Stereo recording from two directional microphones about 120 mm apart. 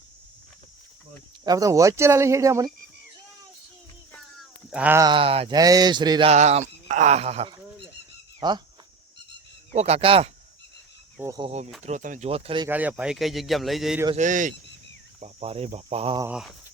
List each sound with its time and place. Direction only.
1.5 s speech: 30° right (ahead or behind)
4.7 s sheep: 10° right (ahead or behind)
5.1 s a sound: 50° right (ahead or behind)
5.5 s speech: 30° right (ahead or behind)
6.2 s speech: 65° right (ahead or behind)
8.4 s speech: 35° right (ahead or behind)
9.7 s speech: 60° right (ahead or behind)
11.2 s speech: 15° right (ahead or behind)
11.8 s speech: 85° right
12.3 s a sound: 50° right (ahead or behind)
12.6 s a man's voice: 15° right (ahead or behind)
14.2 s speech: 90° right
15.2 s speech: 55° right (ahead or behind)